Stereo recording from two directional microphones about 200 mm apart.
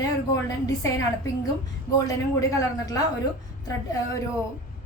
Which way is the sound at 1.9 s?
15° left (ahead or behind).